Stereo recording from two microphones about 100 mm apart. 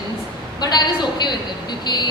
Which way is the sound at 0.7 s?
45° left (ahead or behind).